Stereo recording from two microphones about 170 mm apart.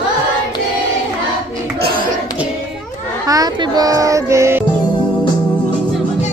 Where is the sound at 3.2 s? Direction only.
20° right (ahead or behind).